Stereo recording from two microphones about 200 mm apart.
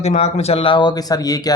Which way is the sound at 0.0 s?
35° left (ahead or behind).